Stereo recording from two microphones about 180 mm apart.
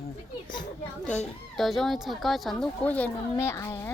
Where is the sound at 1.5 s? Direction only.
Centre (ahead or behind).